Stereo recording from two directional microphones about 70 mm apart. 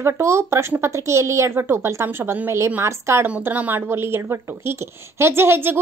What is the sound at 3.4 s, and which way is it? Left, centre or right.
A woman's voice, right.